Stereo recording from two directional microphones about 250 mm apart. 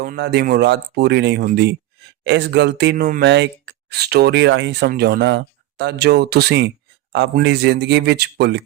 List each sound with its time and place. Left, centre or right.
0.0 s speech: right